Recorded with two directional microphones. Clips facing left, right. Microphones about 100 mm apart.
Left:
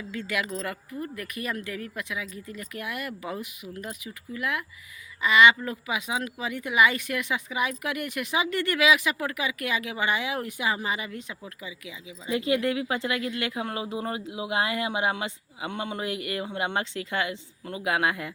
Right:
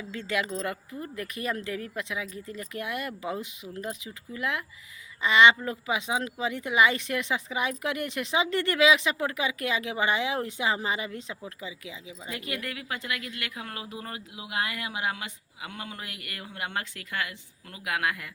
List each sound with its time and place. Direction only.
0.1 s speech: 25° right (ahead or behind)
12.3 s speech: 25° left (ahead or behind)